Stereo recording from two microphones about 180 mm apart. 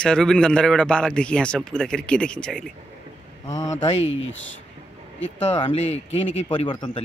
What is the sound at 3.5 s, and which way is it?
Speech, 40° left (ahead or behind).